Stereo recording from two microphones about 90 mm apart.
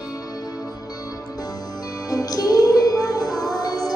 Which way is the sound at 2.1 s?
40° left (ahead or behind).